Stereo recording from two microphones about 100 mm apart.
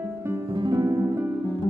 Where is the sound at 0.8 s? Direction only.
30° right (ahead or behind).